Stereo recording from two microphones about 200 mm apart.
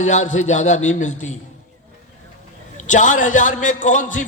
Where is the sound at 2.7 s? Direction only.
40° left (ahead or behind).